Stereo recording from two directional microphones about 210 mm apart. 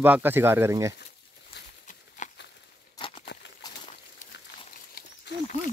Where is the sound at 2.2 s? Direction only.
35° left (ahead or behind).